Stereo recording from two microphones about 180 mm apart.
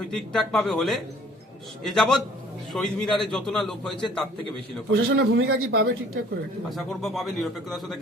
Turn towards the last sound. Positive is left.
turn(degrees=0)  # may be behind; listen again after turning